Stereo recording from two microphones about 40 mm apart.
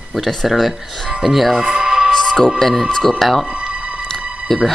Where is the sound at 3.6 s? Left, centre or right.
Right.